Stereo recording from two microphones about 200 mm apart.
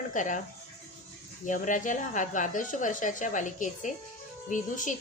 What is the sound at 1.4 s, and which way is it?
A woman's voice, 40° left (ahead or behind).